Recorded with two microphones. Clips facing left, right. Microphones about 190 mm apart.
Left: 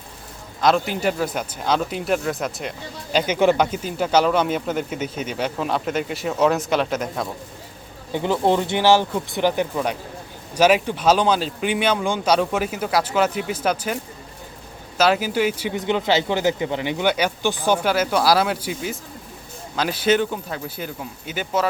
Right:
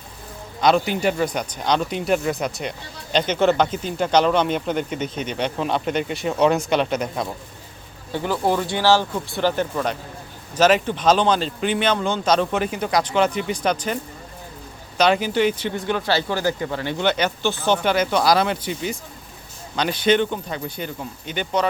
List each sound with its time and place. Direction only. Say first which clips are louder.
0.6 s speech: right 1 dB; centre (ahead or behind)
8.1 s speech: left 2 dB; 20° left (ahead or behind); by 21.7 s 5° left (ahead or behind)